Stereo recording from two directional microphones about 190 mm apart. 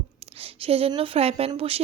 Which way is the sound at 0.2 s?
30° right (ahead or behind).